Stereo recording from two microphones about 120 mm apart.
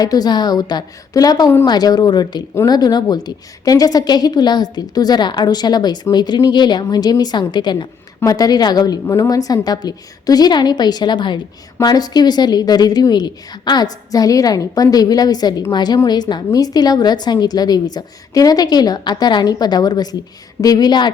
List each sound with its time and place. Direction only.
0.0 s a woman's voice: 35° left (ahead or behind)